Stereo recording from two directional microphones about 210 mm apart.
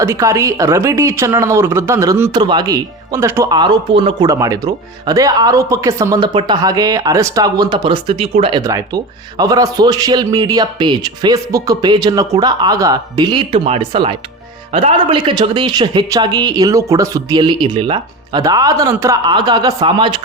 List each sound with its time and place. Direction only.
0.0 s speech: 15° right (ahead or behind)